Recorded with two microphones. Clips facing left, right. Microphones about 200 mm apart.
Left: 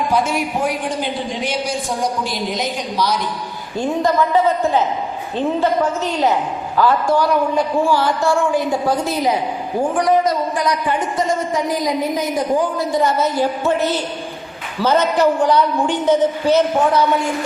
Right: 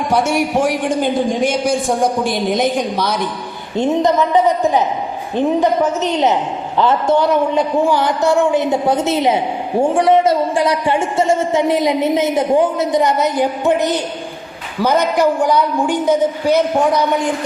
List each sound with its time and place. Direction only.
0.1 s a man's voice: 75° right (ahead or behind)
0.9 s a woman's voice: 45° right (ahead or behind)
3.8 s a woman's voice: 20° right (ahead or behind)